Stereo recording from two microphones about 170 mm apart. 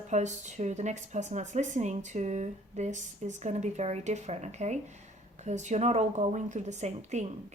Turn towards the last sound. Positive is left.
turn(degrees=-40)  # may be behind; listen again after turning